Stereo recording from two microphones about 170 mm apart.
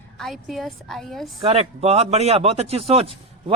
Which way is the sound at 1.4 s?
35° right (ahead or behind).